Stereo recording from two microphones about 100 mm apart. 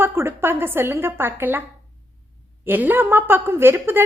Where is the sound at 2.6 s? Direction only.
20° right (ahead or behind).